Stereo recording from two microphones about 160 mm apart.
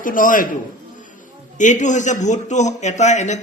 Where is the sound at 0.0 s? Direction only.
60° left (ahead or behind).